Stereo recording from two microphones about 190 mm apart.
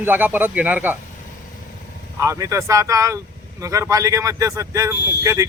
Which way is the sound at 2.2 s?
15° right (ahead or behind).